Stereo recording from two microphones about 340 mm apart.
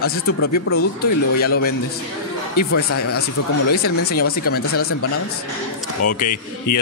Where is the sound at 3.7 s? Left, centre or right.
Left.